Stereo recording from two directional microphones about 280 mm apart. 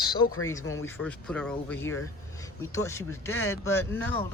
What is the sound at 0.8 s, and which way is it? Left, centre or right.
Speech, centre.